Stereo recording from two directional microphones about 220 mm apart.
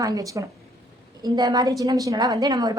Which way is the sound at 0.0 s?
15° right (ahead or behind).